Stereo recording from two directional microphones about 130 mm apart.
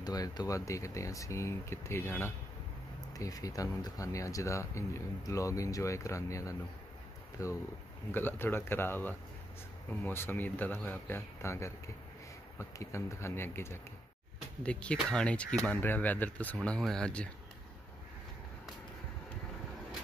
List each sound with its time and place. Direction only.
0.0 s speech: 30° left (ahead or behind); by 17.3 s 5° left (ahead or behind)